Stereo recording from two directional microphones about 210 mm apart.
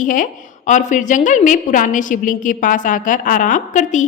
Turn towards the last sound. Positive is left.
turn(degrees=35)  # may be behind; listen again after turning